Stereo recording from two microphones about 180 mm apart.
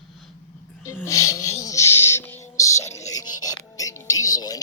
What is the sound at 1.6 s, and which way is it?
Music, 15° left (ahead or behind).